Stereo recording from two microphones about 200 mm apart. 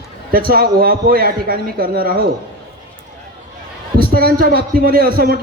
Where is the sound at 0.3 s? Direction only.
50° right (ahead or behind).